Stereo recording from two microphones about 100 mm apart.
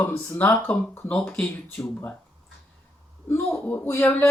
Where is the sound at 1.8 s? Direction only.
25° left (ahead or behind).